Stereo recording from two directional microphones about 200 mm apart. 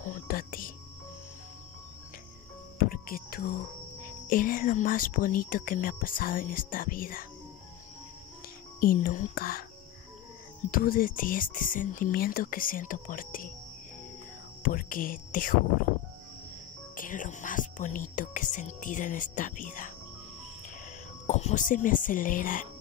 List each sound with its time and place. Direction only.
0.0 s music: 40° left (ahead or behind)
2.8 s music: 45° left (ahead or behind)
4.3 s speech: 45° left (ahead or behind)
8.7 s speech: 45° left (ahead or behind)
10.7 s speech: 45° left (ahead or behind)
14.6 s speech: 45° left (ahead or behind)
16.9 s speech: 40° left (ahead or behind)
21.3 s speech: 35° left (ahead or behind)